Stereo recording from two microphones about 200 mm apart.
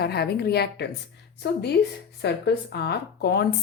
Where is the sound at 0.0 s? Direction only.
55° left (ahead or behind).